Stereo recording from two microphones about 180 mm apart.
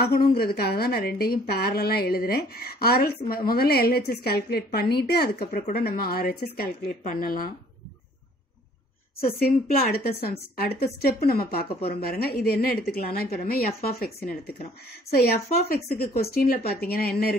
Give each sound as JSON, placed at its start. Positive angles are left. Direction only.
{"t": 0.0, "sound": "speech", "side_deg": 60}
{"t": 9.4, "sound": "speech", "side_deg": 55}